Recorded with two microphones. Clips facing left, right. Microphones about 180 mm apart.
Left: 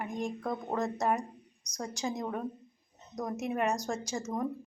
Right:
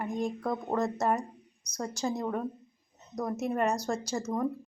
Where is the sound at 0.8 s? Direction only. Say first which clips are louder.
Right 1 dB; 10° left (ahead or behind).